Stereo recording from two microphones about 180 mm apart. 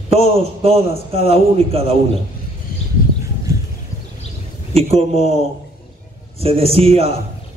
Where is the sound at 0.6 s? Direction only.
35° right (ahead or behind).